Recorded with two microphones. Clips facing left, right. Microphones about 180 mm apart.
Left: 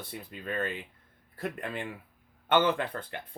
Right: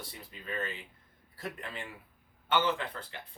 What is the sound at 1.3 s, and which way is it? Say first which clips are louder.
Speech: left 6 dB; 55° left (ahead or behind).